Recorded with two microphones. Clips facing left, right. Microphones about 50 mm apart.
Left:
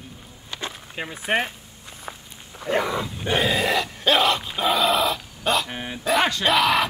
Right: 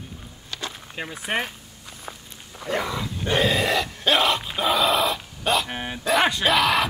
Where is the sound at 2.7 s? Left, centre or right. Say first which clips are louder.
Left 3 dB; left.